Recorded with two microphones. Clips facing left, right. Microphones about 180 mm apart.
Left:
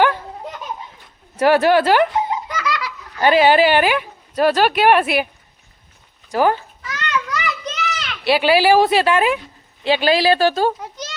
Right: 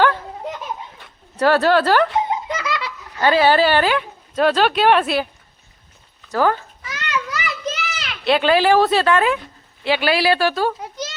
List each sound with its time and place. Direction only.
1.4 s speech: 15° left (ahead or behind)
2.3 s belly laugh: 25° right (ahead or behind)
3.2 s speech: 15° left (ahead or behind)
6.3 s speech: 15° left (ahead or behind)
6.9 s children playing: 10° right (ahead or behind); by 9.4 s 15° left (ahead or behind)
9.8 s speech: 20° left (ahead or behind)